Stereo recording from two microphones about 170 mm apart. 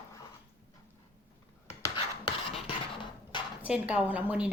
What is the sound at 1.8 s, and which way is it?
Rub, 25° left (ahead or behind).